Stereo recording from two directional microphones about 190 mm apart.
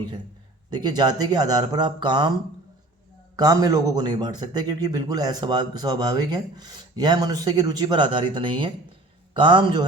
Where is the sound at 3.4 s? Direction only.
20° right (ahead or behind).